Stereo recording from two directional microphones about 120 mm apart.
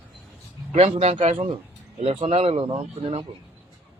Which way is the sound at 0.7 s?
65° right (ahead or behind).